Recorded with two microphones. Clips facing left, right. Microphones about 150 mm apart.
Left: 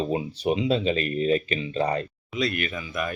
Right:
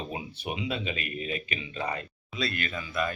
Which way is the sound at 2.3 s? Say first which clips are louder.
Left 5 dB; 20° left (ahead or behind).